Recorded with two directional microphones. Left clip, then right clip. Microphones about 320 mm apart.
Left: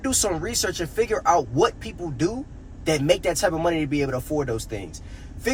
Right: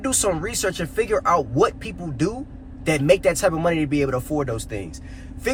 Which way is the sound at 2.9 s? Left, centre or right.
Centre.